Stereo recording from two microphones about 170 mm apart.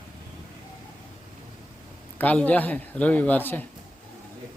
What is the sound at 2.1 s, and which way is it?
Speech, 10° left (ahead or behind).